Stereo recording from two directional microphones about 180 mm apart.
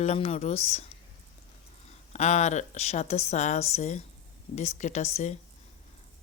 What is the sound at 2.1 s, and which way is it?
A woman's voice, 40° left (ahead or behind).